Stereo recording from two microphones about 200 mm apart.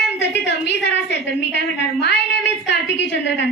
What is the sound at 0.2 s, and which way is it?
A woman's voice, 60° left (ahead or behind).